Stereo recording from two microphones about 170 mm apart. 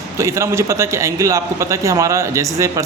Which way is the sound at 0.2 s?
15° right (ahead or behind).